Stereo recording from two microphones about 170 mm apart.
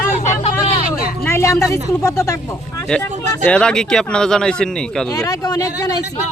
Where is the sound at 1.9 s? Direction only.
15° left (ahead or behind).